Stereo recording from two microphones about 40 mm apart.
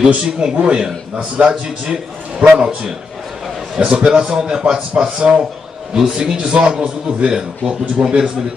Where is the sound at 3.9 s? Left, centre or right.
Right.